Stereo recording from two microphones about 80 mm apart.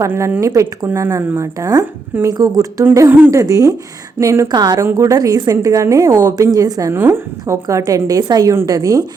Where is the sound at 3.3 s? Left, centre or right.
Right.